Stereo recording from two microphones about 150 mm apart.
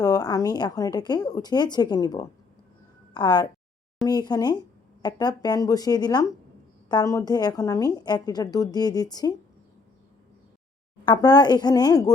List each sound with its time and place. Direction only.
0.0 s a woman's voice: 25° left (ahead or behind)
11.0 s a woman's voice: 30° left (ahead or behind)